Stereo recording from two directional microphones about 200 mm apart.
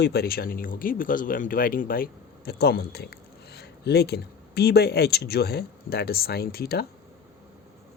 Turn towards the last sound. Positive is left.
turn(degrees=50)  # may be behind; listen again after turning